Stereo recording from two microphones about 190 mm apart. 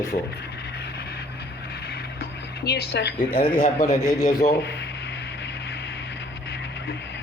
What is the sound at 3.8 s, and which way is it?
Speech, 20° left (ahead or behind).